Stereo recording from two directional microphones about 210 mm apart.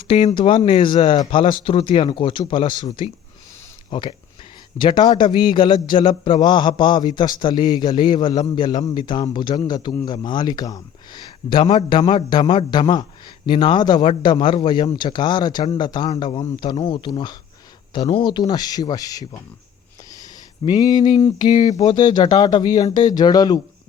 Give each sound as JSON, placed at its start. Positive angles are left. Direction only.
{"t": 0.1, "sound": "a man's voice", "side_deg": 25}
{"t": 20.7, "sound": "a man's voice", "side_deg": 20}